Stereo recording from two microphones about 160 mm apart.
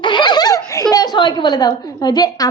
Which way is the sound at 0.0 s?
30° left (ahead or behind).